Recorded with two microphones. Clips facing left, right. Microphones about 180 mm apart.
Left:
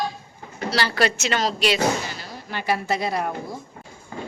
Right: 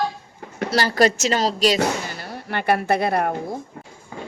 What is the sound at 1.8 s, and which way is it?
Speech, 60° right (ahead or behind).